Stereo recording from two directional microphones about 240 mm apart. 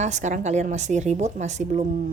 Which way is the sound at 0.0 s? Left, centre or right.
Right.